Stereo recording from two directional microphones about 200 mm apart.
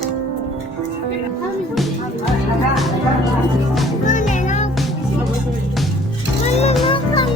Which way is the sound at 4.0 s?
40° left (ahead or behind).